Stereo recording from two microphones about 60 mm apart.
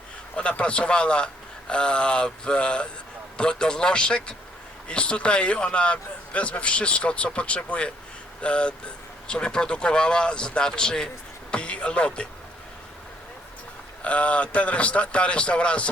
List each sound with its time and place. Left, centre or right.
0.3 s a man's voice: centre
14.0 s a man's voice: left